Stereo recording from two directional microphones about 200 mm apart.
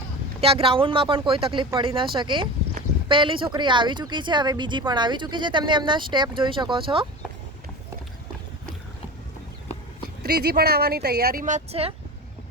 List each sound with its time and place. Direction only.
0.4 s speech: 25° right (ahead or behind)
10.2 s speech: 50° right (ahead or behind); by 11.9 s 30° right (ahead or behind)